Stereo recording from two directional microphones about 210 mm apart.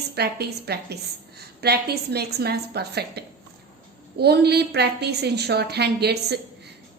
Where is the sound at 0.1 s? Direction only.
50° right (ahead or behind).